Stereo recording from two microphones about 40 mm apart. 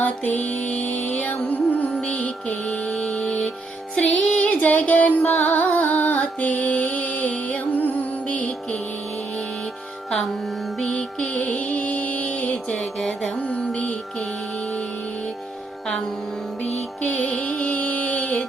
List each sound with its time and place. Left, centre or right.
0.0 s music: left
2.1 s mantra: left
3.0 s music: left
3.9 s music: left
4.4 s music: left
11.3 s music: left
13.0 s music: centre
13.5 s music: left
17.0 s music: left